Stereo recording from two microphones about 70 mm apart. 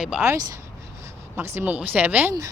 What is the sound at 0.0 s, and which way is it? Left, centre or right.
Speech, centre.